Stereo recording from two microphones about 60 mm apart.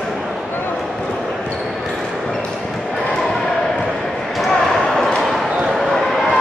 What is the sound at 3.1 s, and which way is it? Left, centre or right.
Basketball bounce, centre.